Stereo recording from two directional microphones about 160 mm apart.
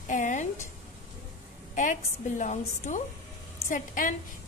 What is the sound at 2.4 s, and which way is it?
A woman's voice, 50° left (ahead or behind).